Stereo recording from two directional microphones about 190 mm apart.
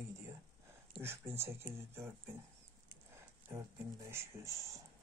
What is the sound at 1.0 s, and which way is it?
Speech, 10° right (ahead or behind).